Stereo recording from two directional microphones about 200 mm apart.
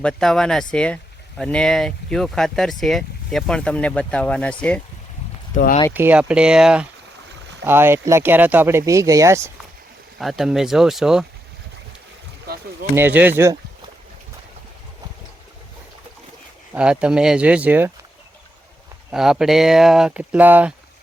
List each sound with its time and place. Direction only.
0.0 s speech: centre (ahead or behind)
5.9 s speech: 10° right (ahead or behind)
10.2 s speech: centre (ahead or behind)
13.0 s speech: 10° right (ahead or behind)
16.7 s speech: 5° right (ahead or behind)
19.1 s speech: centre (ahead or behind)